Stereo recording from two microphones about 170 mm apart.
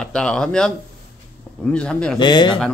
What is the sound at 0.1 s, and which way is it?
Speech, 5° left (ahead or behind).